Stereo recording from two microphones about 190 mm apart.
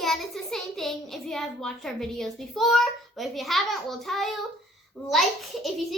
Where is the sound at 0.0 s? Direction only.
Centre (ahead or behind).